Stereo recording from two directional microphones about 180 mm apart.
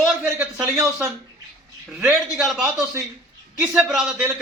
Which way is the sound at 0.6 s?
15° right (ahead or behind).